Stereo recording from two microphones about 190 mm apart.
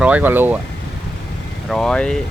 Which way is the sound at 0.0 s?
5° right (ahead or behind).